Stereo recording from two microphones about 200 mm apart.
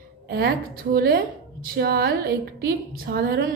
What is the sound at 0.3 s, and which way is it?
A woman's voice, 50° right (ahead or behind).